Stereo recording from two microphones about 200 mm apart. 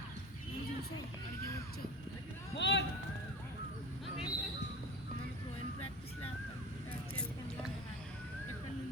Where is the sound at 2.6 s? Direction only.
60° left (ahead or behind).